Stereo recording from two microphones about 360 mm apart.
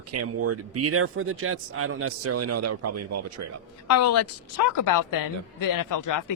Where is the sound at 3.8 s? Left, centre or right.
Left.